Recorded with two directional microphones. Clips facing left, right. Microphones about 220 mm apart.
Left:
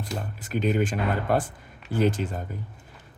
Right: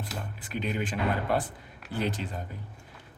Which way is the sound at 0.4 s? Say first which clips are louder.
Left 7 dB; 45° left (ahead or behind).